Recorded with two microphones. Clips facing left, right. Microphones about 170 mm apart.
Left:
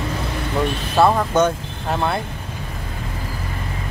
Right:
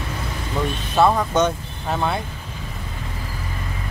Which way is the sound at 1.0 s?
5° left (ahead or behind).